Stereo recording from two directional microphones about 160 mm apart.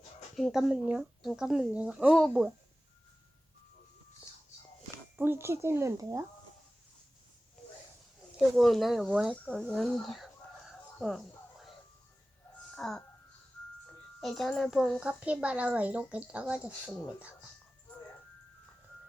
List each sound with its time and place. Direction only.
0.3 s speech: centre (ahead or behind)
5.1 s a woman's voice: 15° right (ahead or behind)
8.4 s a woman's voice: centre (ahead or behind)
9.5 s speech: 5° left (ahead or behind)
11.0 s a sound: centre (ahead or behind)
12.7 s speech: centre (ahead or behind)
14.2 s a woman's voice: centre (ahead or behind)